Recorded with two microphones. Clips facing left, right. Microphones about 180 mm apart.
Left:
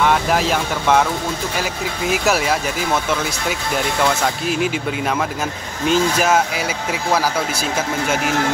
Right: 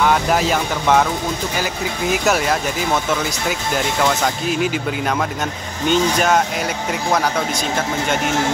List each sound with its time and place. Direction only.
0.0 s speech: centre (ahead or behind)